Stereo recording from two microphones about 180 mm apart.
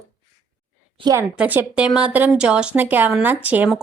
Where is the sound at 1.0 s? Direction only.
20° right (ahead or behind).